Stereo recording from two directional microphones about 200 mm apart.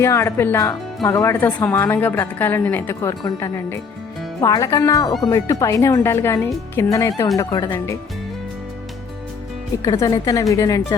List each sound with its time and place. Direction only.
0.0 s a woman's voice: 15° left (ahead or behind)
9.8 s a woman's voice: 20° left (ahead or behind)